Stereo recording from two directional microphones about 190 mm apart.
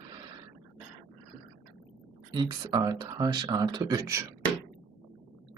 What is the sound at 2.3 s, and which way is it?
Speech, 20° right (ahead or behind).